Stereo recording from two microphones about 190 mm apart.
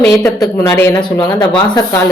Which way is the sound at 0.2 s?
20° left (ahead or behind).